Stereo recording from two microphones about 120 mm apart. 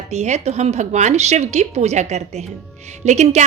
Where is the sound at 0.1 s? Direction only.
70° right (ahead or behind).